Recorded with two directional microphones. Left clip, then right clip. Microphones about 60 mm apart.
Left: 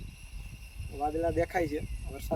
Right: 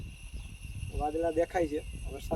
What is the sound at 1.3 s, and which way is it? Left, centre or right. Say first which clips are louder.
Speech: even; left.